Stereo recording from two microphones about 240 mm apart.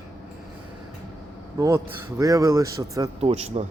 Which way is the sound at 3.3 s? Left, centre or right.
Right.